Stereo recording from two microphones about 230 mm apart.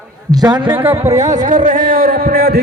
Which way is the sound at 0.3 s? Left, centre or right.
Centre.